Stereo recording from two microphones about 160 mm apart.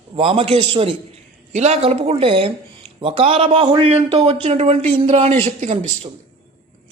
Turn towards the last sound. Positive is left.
turn(degrees=-45)  # may be behind; listen again after turning